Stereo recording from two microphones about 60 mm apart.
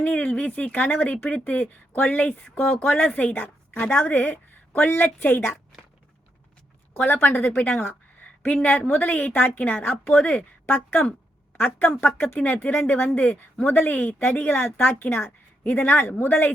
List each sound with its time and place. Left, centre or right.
0.1 s speech: left
7.0 s a woman's voice: left
7.8 s a sound: left
8.6 s speech: left
10.8 s a woman's voice: left